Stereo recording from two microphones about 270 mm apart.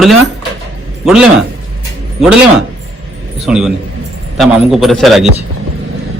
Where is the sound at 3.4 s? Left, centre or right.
Centre.